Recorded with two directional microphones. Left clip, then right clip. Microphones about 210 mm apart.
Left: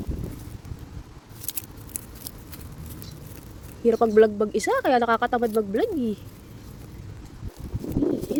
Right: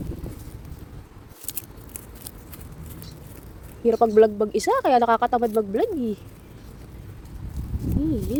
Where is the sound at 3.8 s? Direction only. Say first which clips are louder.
Right 1 dB; 5° left (ahead or behind).